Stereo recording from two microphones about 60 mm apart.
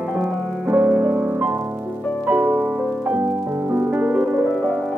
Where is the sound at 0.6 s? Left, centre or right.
Right.